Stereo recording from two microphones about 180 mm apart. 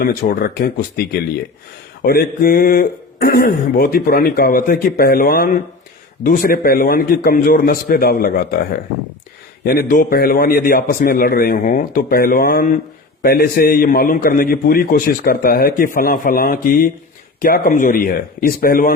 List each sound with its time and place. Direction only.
0.0 s a man's voice: 50° left (ahead or behind)
9.6 s a man's voice: 55° left (ahead or behind)